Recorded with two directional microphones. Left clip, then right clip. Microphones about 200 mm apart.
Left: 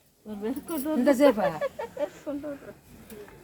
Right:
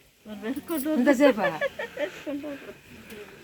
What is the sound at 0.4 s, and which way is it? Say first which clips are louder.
Speech: right 1 dB; 40° left (ahead or behind).